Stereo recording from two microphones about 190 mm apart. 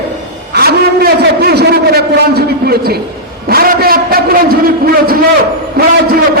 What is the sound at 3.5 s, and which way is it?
A man's voice, 50° right (ahead or behind).